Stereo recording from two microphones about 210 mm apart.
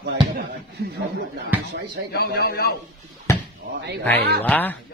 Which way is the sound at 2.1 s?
45° left (ahead or behind).